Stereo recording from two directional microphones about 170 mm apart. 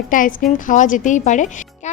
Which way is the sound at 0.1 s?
55° left (ahead or behind).